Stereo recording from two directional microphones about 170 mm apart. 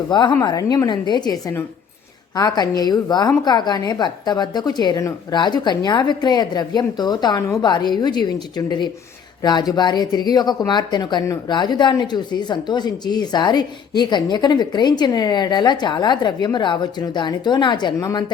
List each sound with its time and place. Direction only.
0.1 s speech: 25° left (ahead or behind)